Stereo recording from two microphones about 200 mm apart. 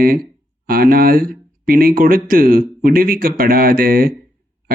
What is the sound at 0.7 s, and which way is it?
Speech, 45° right (ahead or behind).